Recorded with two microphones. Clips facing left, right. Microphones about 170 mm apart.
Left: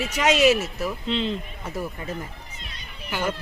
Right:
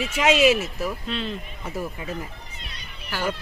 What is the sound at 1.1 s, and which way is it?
Speech, 20° left (ahead or behind).